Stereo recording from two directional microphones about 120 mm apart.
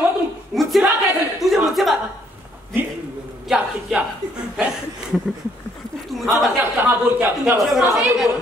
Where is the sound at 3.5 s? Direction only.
5° right (ahead or behind).